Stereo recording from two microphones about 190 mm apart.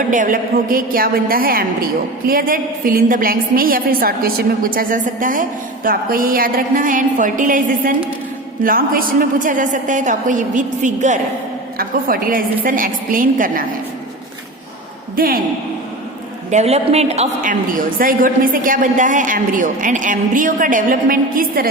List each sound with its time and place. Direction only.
0.1 s a woman's voice: 45° right (ahead or behind)
15.1 s a man's voice: 50° right (ahead or behind)
16.5 s a woman's voice: 35° right (ahead or behind)